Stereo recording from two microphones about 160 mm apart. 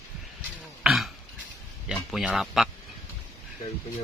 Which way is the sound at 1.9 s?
5° right (ahead or behind).